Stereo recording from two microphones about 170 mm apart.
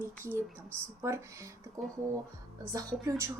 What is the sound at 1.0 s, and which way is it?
Speech, 15° right (ahead or behind).